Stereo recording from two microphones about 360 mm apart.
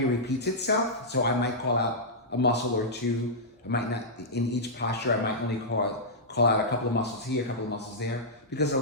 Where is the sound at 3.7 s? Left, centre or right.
Left.